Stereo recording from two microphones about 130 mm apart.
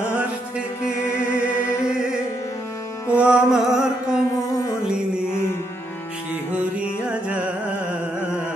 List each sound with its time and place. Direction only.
0.8 s music: 20° left (ahead or behind)
3.1 s music: 10° right (ahead or behind)
6.5 s music: 10° right (ahead or behind)